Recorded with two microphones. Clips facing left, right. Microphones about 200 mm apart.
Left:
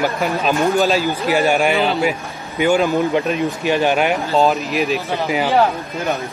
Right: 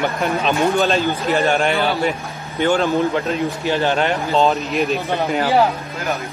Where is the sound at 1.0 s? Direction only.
15° left (ahead or behind).